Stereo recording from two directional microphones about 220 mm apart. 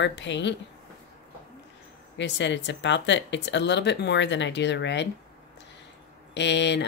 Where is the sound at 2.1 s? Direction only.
55° left (ahead or behind).